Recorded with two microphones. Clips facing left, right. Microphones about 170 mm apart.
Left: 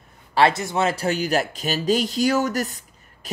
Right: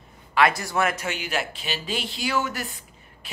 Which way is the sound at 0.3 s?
30° left (ahead or behind).